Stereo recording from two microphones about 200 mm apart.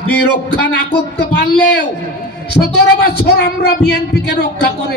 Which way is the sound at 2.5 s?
55° left (ahead or behind).